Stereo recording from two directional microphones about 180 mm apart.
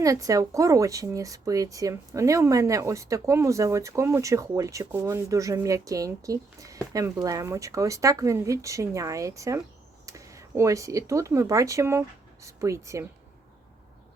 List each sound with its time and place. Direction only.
0.0 s speech: 20° right (ahead or behind)